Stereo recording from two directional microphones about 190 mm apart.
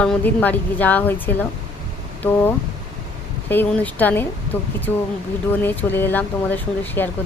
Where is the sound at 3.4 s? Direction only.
10° left (ahead or behind).